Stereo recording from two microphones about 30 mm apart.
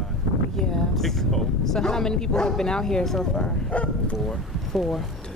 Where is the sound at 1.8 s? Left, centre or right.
Centre.